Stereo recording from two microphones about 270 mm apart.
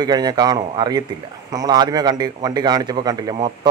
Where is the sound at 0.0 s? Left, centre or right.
Centre.